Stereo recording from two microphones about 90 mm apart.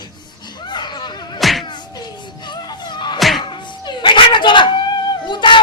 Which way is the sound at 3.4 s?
60° left (ahead or behind).